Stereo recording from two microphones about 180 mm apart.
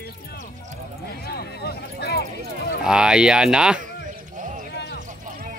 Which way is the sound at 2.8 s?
5° right (ahead or behind).